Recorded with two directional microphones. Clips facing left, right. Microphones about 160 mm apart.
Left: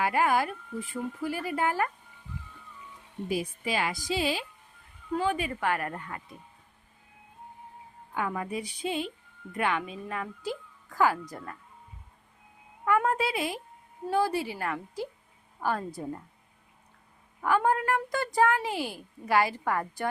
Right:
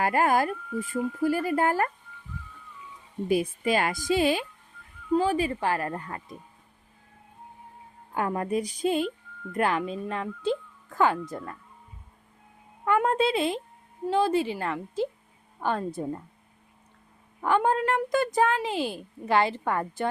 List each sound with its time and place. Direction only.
0.0 s speech: 45° right (ahead or behind)
3.2 s speech: 55° right (ahead or behind)
5.1 s speech: 35° right (ahead or behind)
8.4 s speech: 45° right (ahead or behind); by 11.5 s 25° right (ahead or behind)
12.8 s a child's voice: 25° right (ahead or behind)
17.4 s a child's voice: 25° right (ahead or behind)